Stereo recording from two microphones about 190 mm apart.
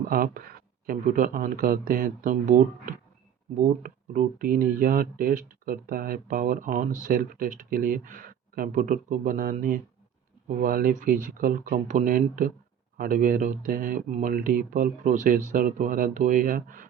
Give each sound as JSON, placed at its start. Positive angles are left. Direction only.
{"t": 0.1, "sound": "speech", "side_deg": -50}